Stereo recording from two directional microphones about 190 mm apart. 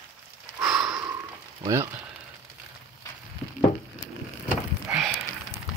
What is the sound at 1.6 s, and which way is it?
Speech, 15° right (ahead or behind).